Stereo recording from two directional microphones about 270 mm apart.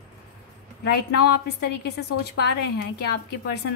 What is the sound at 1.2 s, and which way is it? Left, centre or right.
Speech, left.